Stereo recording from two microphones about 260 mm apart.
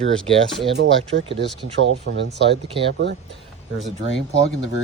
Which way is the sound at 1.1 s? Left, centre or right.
Right.